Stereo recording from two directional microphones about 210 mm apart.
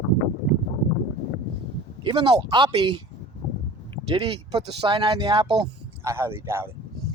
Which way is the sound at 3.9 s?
25° right (ahead or behind).